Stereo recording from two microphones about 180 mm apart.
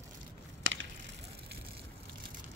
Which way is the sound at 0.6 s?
90° right.